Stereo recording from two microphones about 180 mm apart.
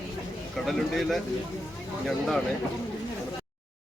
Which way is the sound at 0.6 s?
Centre (ahead or behind).